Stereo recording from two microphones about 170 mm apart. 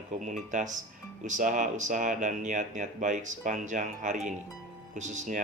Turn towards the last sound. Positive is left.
turn(degrees=-45)  # may be behind; listen again after turning